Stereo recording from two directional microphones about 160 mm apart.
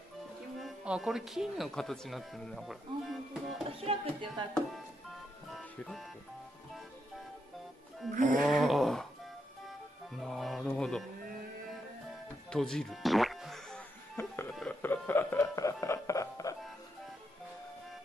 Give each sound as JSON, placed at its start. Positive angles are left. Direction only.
{"t": 0.6, "sound": "speech", "side_deg": -5}
{"t": 3.8, "sound": "speech", "side_deg": -35}
{"t": 5.5, "sound": "music", "side_deg": 0}
{"t": 8.4, "sound": "speech", "side_deg": 0}
{"t": 10.1, "sound": "music", "side_deg": 0}
{"t": 12.4, "sound": "music", "side_deg": 5}
{"t": 14.1, "sound": "music", "side_deg": 15}
{"t": 14.5, "sound": "speech", "side_deg": 0}
{"t": 14.8, "sound": "speech", "side_deg": 15}